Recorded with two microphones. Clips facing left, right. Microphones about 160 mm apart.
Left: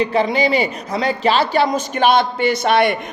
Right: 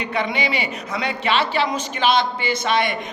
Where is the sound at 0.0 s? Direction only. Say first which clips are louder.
Left 7 dB; 35° left (ahead or behind); by 2.9 s 60° left (ahead or behind).